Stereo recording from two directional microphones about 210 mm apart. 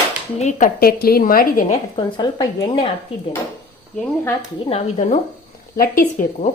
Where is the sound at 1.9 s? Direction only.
20° left (ahead or behind).